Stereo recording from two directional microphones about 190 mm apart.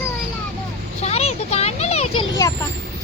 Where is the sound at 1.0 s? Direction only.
35° left (ahead or behind).